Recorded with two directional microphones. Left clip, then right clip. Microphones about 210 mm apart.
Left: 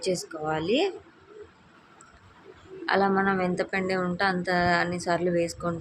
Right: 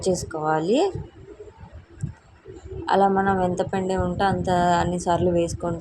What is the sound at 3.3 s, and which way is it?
A woman's voice, 15° right (ahead or behind).